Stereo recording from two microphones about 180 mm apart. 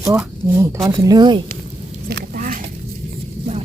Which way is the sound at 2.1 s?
55° right (ahead or behind).